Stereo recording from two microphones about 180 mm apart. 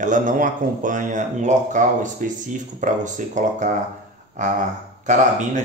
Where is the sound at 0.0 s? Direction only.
45° right (ahead or behind).